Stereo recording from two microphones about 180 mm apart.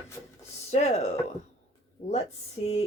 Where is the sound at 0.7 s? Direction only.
35° left (ahead or behind).